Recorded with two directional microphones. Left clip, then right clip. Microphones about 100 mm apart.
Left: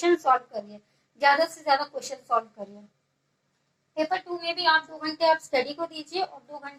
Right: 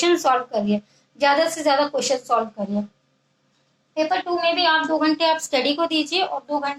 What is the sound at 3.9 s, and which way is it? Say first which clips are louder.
A woman's voice: right 7 dB; 40° right (ahead or behind).